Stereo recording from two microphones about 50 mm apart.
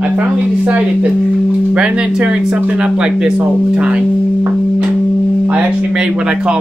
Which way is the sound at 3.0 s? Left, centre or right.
Centre.